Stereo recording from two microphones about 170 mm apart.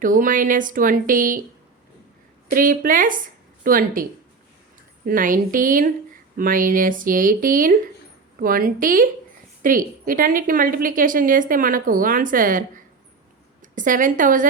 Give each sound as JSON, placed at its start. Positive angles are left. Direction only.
{"t": 0.0, "sound": "a woman's voice", "side_deg": -50}
{"t": 2.5, "sound": "a woman's voice", "side_deg": -55}
{"t": 5.0, "sound": "a woman's voice", "side_deg": -55}